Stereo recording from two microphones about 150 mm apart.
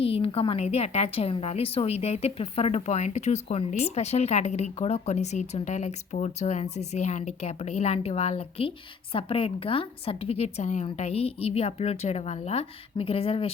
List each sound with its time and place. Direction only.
0.0 s a woman's voice: 40° left (ahead or behind)